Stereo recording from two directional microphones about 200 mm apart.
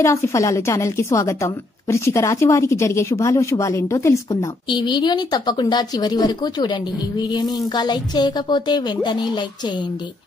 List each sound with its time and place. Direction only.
0.0 s a woman's voice: 15° left (ahead or behind)